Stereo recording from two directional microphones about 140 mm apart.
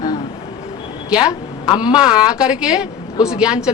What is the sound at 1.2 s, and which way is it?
A woman's voice, 30° left (ahead or behind).